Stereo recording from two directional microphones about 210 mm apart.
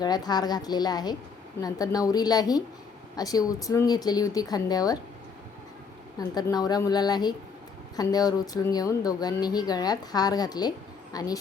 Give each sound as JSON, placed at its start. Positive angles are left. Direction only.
{"t": 0.0, "sound": "a woman's voice", "side_deg": 20}
{"t": 6.1, "sound": "a woman's voice", "side_deg": 20}